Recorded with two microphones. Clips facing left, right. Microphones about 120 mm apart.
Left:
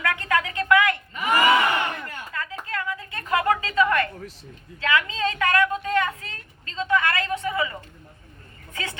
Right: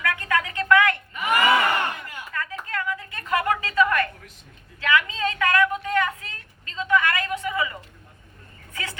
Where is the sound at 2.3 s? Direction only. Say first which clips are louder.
Right 1 dB; 25° left (ahead or behind).